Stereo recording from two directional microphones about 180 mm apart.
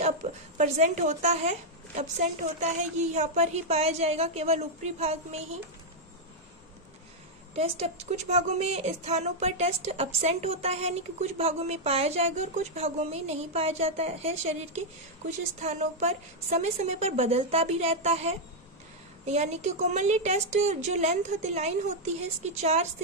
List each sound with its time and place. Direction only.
0.2 s a woman's voice: 35° right (ahead or behind)
7.5 s a woman's voice: 35° right (ahead or behind)